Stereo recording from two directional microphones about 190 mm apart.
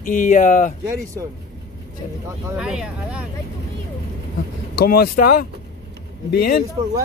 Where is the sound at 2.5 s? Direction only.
5° right (ahead or behind).